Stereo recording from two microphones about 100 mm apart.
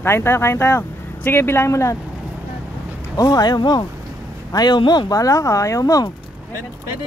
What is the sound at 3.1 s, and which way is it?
Speech, 40° left (ahead or behind).